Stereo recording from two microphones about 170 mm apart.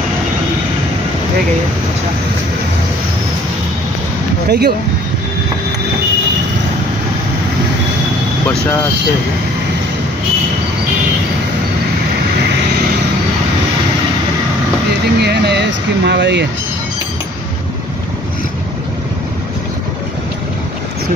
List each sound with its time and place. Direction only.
4.5 s speech: 70° right (ahead or behind)
15.1 s a sound: 75° right (ahead or behind)
16.1 s speech: 90° right